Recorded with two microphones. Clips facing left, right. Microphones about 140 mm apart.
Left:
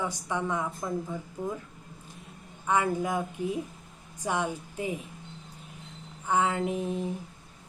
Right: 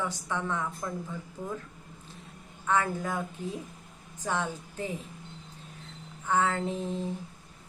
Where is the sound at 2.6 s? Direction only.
15° left (ahead or behind).